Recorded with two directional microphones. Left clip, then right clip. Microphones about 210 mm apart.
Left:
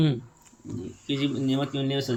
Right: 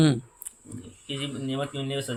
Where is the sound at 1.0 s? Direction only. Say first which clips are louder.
Left 5 dB; 15° right (ahead or behind).